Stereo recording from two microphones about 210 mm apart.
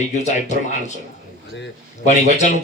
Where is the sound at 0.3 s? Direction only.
35° left (ahead or behind).